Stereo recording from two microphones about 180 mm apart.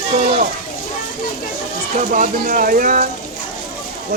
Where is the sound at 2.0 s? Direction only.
50° right (ahead or behind).